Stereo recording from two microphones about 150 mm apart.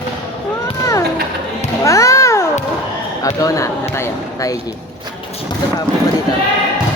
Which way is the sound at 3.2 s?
20° left (ahead or behind).